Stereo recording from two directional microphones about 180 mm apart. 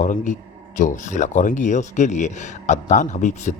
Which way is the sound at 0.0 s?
45° left (ahead or behind).